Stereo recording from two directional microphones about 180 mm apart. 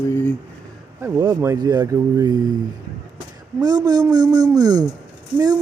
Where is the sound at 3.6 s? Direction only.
20° right (ahead or behind).